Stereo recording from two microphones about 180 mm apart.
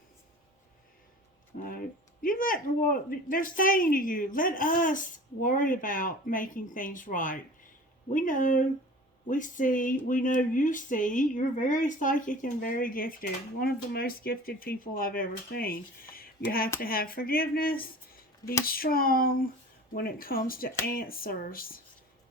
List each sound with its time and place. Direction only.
1.5 s speech: 50° left (ahead or behind)